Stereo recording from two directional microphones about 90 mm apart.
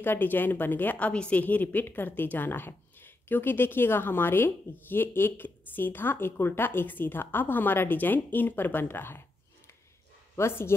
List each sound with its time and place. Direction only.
0.0 s a woman's voice: 25° left (ahead or behind)
10.3 s speech: 30° left (ahead or behind)